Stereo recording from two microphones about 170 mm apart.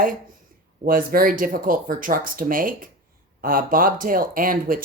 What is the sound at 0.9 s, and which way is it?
Speech, 55° right (ahead or behind).